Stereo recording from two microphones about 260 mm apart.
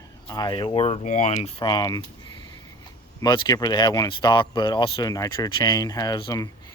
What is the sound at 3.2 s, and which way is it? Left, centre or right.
Speech, centre.